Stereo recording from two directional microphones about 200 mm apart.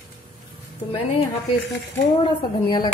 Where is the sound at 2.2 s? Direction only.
20° left (ahead or behind).